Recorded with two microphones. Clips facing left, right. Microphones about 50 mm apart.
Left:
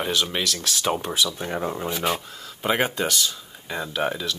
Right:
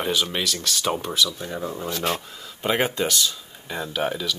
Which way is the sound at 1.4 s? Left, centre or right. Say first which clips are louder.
Left 3 dB; left.